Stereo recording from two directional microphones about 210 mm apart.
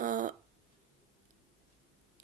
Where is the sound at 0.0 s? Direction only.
40° right (ahead or behind).